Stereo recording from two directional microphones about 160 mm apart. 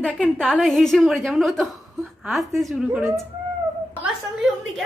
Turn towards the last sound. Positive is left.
turn(degrees=-5)  # may be behind; listen again after turning